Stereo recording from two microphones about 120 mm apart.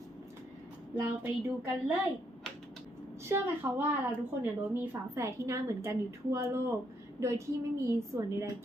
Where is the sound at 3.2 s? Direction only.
20° right (ahead or behind).